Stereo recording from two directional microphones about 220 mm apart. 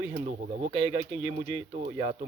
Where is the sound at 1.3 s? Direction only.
35° right (ahead or behind).